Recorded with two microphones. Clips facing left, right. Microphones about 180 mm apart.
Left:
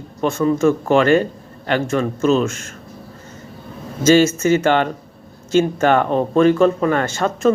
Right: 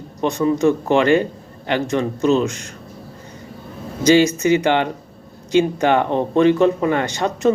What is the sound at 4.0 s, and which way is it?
Speech, 15° right (ahead or behind).